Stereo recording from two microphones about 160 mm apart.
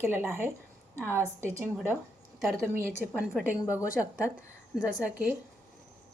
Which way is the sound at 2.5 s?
15° right (ahead or behind).